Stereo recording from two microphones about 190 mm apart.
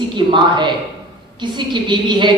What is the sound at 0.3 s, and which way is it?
A woman's voice, 25° right (ahead or behind).